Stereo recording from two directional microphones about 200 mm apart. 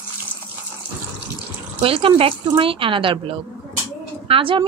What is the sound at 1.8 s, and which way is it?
A woman's voice, 25° right (ahead or behind).